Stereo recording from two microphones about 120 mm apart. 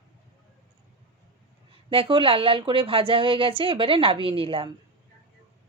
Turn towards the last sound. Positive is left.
turn(degrees=-50)  # may be behind; listen again after turning